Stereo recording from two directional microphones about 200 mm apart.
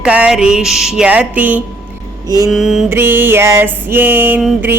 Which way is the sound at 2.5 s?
Centre (ahead or behind).